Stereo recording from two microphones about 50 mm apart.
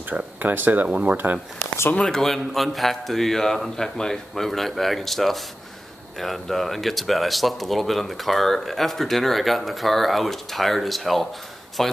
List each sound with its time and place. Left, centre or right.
0.4 s speech: right
0.8 s speech: right
1.1 s speech: right
2.0 s speech: centre